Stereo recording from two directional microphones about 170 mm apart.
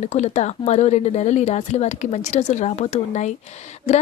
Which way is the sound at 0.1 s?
40° left (ahead or behind).